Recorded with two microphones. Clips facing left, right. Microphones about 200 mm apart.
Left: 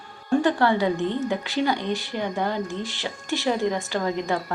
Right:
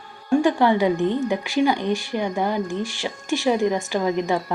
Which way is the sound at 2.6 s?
20° left (ahead or behind).